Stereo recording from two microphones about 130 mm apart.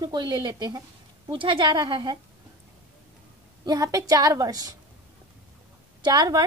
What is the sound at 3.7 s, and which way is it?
A woman's voice, 25° right (ahead or behind).